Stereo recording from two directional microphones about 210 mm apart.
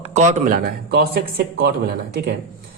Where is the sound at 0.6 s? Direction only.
50° right (ahead or behind).